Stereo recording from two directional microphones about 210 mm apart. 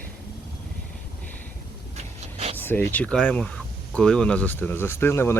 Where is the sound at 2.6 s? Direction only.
10° left (ahead or behind).